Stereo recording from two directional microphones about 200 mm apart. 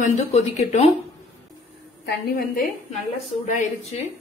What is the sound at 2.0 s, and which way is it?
Speech, 50° left (ahead or behind).